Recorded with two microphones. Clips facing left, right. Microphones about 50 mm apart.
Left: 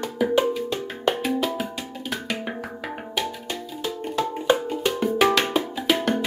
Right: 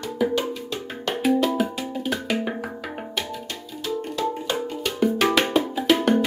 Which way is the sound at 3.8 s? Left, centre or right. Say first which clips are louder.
Right 1 dB; left.